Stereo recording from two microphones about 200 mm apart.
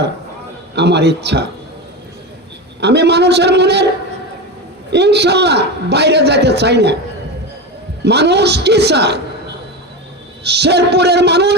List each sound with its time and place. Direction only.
0.8 s a man's voice: 55° right (ahead or behind)
2.8 s a man's voice: 55° right (ahead or behind)
4.9 s a man's voice: 55° right (ahead or behind)
8.0 s a man's voice: 55° right (ahead or behind)
10.4 s a man's voice: 55° right (ahead or behind)